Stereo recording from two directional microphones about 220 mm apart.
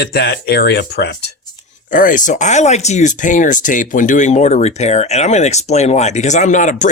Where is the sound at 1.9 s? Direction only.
35° left (ahead or behind).